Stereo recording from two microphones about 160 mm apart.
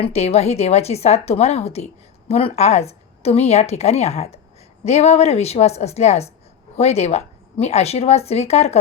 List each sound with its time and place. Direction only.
0.0 s speech: 40° left (ahead or behind)